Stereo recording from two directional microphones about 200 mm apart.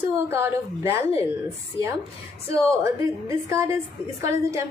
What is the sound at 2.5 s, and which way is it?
A woman's voice, 15° right (ahead or behind).